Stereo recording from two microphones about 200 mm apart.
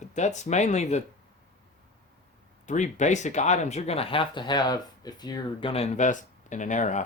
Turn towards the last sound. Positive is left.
turn(degrees=40)  # may be behind; listen again after turning